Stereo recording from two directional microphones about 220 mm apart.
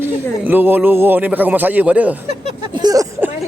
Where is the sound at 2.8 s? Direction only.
15° right (ahead or behind).